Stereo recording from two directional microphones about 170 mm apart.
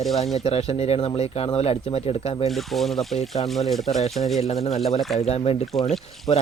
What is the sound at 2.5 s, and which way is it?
Speech, centre (ahead or behind).